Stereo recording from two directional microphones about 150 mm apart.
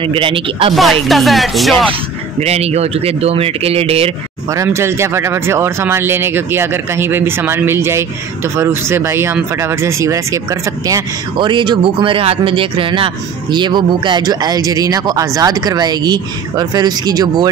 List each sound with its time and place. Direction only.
0.0 s speech: 35° right (ahead or behind)
0.7 s music: centre (ahead or behind)
2.4 s speech: 45° right (ahead or behind)
4.5 s speech: 20° right (ahead or behind)
11.3 s speech: 30° right (ahead or behind)